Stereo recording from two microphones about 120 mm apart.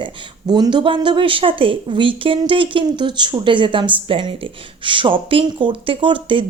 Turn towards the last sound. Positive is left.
turn(degrees=-45)  # may be behind; listen again after turning